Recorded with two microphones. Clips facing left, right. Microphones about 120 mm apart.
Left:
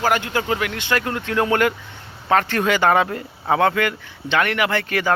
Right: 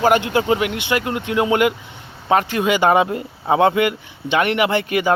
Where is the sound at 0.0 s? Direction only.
20° right (ahead or behind).